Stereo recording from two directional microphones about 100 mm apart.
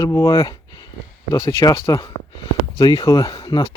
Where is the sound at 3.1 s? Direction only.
40° left (ahead or behind).